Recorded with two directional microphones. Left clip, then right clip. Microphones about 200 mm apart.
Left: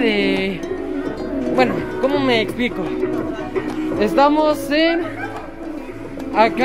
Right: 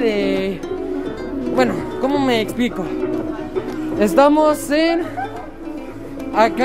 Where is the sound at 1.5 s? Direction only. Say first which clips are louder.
Even; 15° right (ahead or behind).